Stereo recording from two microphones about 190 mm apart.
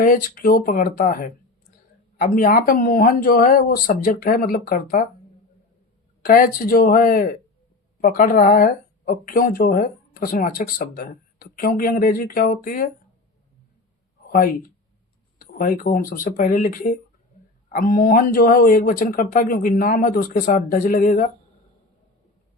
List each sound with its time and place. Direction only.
0.0 s speech: 45° left (ahead or behind)
6.2 s speech: 50° left (ahead or behind)
15.5 s speech: 45° left (ahead or behind)